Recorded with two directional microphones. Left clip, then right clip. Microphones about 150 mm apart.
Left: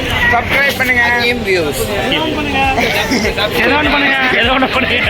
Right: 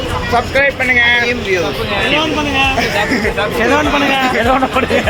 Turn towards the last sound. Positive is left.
turn(degrees=55)  # may be behind; listen again after turning